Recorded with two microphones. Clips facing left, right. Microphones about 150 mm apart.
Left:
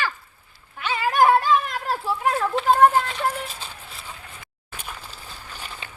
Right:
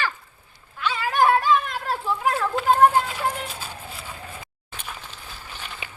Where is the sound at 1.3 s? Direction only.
Centre (ahead or behind).